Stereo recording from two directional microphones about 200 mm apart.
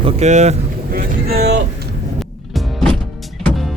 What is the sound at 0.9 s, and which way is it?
Boat, 50° right (ahead or behind).